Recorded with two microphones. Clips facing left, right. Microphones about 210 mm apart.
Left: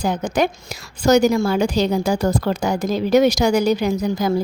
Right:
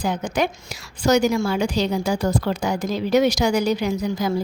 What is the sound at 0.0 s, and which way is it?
A woman's voice, 40° left (ahead or behind).